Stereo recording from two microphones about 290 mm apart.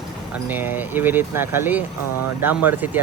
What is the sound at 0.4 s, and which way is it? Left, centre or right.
A man's voice, centre.